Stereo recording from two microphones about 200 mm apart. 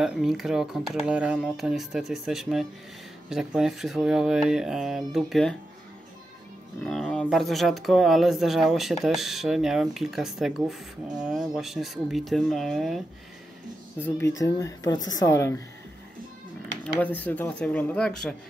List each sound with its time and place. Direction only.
0.0 s speech: 5° right (ahead or behind)
6.8 s speech: 5° left (ahead or behind)
13.9 s speech: 10° left (ahead or behind)
16.8 s speech: 10° left (ahead or behind)